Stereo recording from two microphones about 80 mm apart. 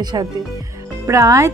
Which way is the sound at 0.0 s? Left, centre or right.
Right.